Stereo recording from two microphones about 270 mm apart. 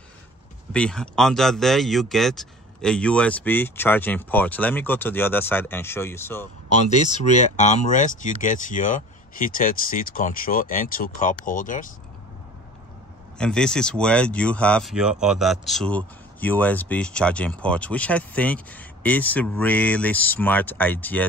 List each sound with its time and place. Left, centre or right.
0.7 s speech: centre
6.9 s speech: left
13.4 s speech: centre